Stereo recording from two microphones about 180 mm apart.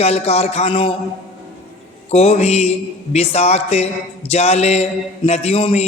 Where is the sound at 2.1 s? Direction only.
35° left (ahead or behind).